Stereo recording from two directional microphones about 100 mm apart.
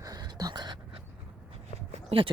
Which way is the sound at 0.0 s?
40° right (ahead or behind).